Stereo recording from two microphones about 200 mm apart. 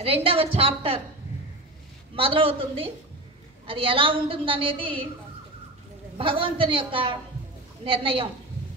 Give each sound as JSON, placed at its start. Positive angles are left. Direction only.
{"t": 0.0, "sound": "a woman's voice", "side_deg": -30}
{"t": 2.1, "sound": "a woman's voice", "side_deg": -25}
{"t": 6.1, "sound": "a woman's voice", "side_deg": -25}